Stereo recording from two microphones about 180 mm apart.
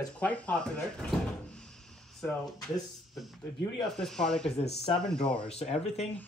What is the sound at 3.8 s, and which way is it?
Speech, centre (ahead or behind).